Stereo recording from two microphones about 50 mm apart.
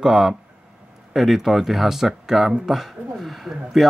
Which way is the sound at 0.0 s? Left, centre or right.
Centre.